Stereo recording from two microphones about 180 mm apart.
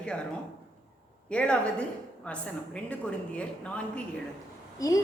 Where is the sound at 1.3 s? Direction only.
5° left (ahead or behind).